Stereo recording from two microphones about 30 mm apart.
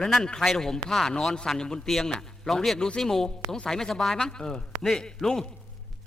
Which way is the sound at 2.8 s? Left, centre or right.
Left.